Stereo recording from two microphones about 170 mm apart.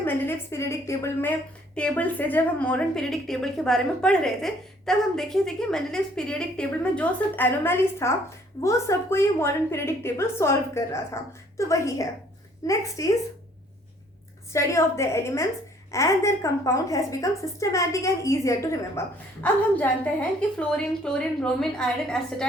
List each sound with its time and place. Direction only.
0.0 s a woman's voice: 15° left (ahead or behind)
14.5 s a woman's voice: 15° left (ahead or behind)